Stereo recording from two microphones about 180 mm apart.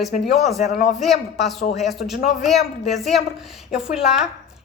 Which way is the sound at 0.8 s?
40° left (ahead or behind).